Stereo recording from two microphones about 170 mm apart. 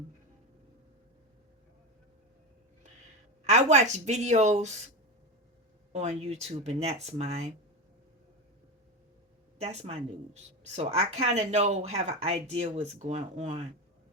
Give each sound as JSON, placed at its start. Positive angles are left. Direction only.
{"t": 3.4, "sound": "speech", "side_deg": -40}
{"t": 5.9, "sound": "speech", "side_deg": -40}
{"t": 9.6, "sound": "speech", "side_deg": -40}